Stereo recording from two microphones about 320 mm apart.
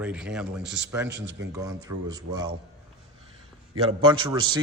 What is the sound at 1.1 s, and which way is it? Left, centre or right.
Speech, right.